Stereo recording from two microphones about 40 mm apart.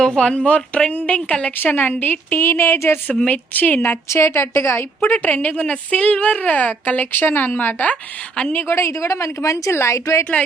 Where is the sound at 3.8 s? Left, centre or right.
Left.